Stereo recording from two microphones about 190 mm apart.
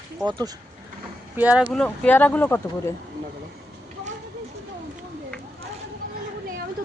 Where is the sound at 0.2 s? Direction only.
20° right (ahead or behind).